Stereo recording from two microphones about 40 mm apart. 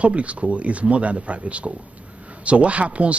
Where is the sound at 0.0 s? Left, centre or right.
Right.